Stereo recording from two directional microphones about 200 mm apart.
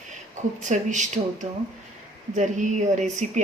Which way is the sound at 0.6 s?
35° right (ahead or behind).